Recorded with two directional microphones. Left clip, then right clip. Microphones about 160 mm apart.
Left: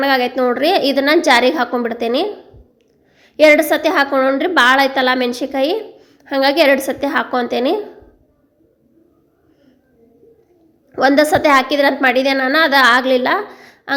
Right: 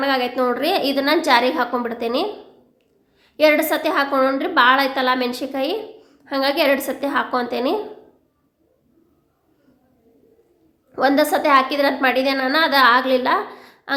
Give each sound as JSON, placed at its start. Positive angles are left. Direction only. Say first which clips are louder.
{"t": 0.0, "sound": "a woman's voice", "louder": "left 4 dB", "side_deg": 30}
{"t": 10.9, "sound": "a woman's voice", "louder": "left 5 dB", "side_deg": 25}